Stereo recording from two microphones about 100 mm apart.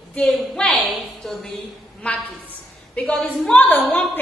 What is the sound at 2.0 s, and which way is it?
A woman's voice, 15° left (ahead or behind).